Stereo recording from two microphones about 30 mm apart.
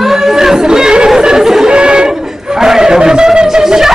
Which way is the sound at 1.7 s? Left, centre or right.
Right.